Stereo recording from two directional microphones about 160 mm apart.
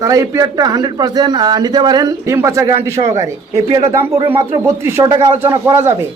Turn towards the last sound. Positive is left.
turn(degrees=-15)  # may be behind; listen again after turning